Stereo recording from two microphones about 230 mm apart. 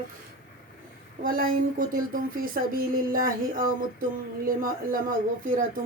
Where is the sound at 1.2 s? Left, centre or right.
Right.